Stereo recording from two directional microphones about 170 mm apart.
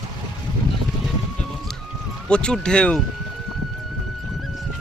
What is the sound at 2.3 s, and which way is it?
Speech, 5° left (ahead or behind).